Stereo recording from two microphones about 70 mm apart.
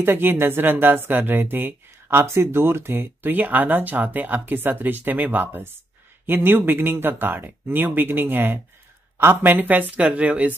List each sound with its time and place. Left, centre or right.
0.0 s speech: right